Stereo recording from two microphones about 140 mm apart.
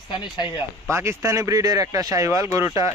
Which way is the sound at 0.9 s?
20° right (ahead or behind).